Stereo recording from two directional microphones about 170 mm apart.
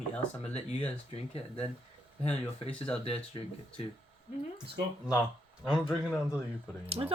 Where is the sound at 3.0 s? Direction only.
35° left (ahead or behind).